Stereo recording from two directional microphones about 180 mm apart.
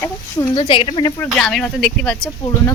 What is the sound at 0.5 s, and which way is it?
Speech, 30° left (ahead or behind).